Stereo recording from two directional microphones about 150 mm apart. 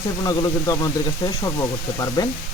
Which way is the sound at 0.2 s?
30° left (ahead or behind).